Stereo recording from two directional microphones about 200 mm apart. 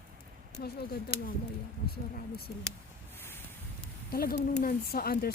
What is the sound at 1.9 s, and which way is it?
Speech, 50° left (ahead or behind).